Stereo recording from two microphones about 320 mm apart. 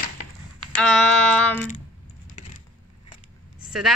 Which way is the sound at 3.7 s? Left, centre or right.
Centre.